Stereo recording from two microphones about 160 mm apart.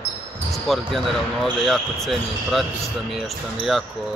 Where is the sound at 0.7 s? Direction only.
Centre (ahead or behind).